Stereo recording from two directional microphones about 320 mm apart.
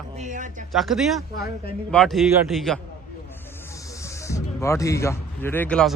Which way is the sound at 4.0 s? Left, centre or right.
Centre.